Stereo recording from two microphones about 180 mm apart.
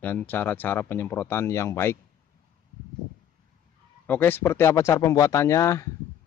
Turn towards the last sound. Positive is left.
turn(degrees=15)  # may be behind; listen again after turning